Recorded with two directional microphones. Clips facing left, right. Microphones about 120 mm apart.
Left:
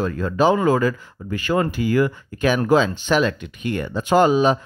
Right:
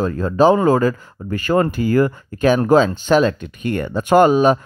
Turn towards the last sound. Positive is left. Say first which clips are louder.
# right 3 dB
turn(degrees=-50)  # may be behind; listen again after turning